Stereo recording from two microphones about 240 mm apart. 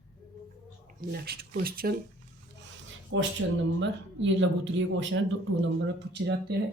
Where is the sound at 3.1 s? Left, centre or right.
Right.